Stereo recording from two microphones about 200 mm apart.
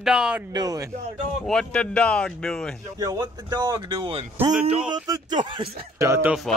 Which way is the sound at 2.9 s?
20° right (ahead or behind).